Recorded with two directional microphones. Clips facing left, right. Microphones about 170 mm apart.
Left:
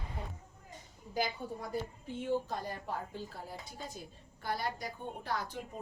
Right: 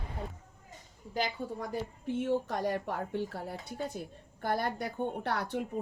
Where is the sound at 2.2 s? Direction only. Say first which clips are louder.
Right 3 dB; 80° right.